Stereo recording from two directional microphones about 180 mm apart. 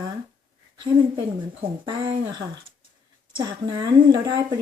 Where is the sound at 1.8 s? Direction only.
25° right (ahead or behind).